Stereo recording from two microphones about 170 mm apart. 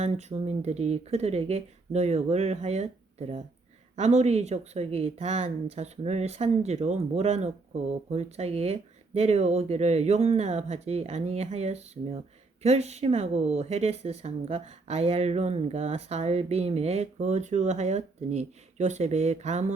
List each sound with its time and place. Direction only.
0.0 s speech: 40° right (ahead or behind)